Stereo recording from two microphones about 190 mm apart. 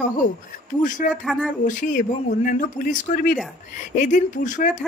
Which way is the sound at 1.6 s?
45° left (ahead or behind).